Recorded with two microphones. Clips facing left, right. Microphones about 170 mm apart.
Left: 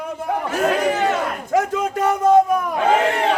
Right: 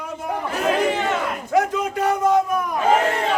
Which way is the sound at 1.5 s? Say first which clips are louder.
Even; 50° left (ahead or behind).